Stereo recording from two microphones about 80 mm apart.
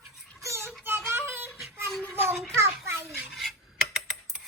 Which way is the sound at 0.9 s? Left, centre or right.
Right.